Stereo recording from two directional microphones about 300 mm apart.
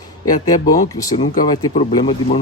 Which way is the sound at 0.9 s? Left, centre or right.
Centre.